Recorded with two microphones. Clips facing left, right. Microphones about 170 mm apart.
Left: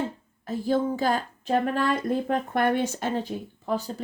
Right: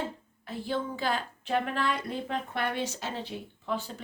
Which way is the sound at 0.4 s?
40° left (ahead or behind).